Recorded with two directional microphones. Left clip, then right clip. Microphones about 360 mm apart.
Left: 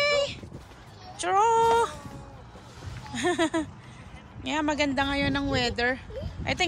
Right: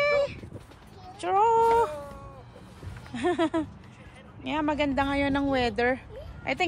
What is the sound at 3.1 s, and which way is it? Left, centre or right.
Speech, centre.